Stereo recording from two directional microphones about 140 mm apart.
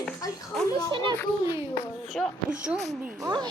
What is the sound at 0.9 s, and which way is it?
Speech, 35° right (ahead or behind).